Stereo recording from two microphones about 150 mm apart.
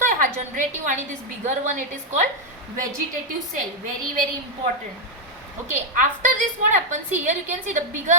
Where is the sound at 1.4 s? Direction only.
55° right (ahead or behind).